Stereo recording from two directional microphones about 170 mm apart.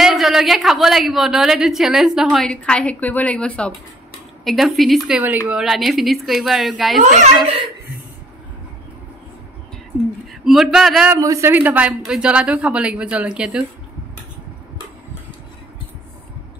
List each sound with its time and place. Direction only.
0.0 s a woman's voice: centre (ahead or behind)
7.0 s a child's voice: 50° right (ahead or behind)
10.4 s a woman's voice: centre (ahead or behind)
11.1 s speech: 20° right (ahead or behind)